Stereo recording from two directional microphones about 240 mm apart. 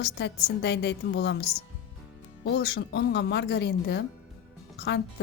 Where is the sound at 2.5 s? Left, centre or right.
Left.